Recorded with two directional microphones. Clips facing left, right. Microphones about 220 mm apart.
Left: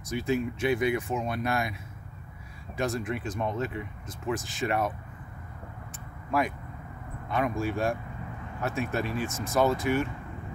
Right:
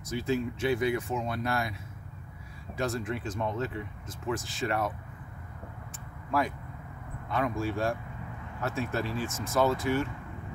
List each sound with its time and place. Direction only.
0.1 s speech: 15° left (ahead or behind)
2.8 s speech: 15° left (ahead or behind)
7.2 s speech: 15° left (ahead or behind)